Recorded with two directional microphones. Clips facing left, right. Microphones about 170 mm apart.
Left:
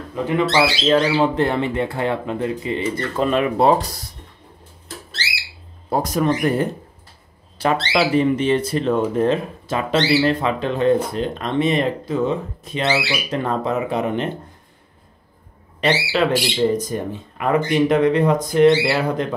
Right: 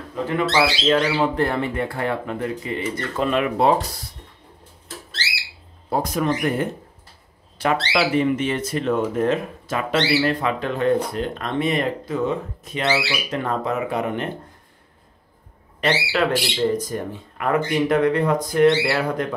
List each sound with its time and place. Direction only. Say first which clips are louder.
0.1 s speech: left 2 dB; 15° left (ahead or behind)
0.8 s speech: left 3 dB; 25° left (ahead or behind)
5.9 s speech: left 3 dB; 40° left (ahead or behind)
7.9 s speech: left 3 dB; 35° left (ahead or behind)
15.8 s speech: left 2 dB; 20° left (ahead or behind)